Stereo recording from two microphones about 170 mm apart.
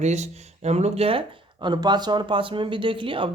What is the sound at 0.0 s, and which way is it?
Speech, 40° right (ahead or behind).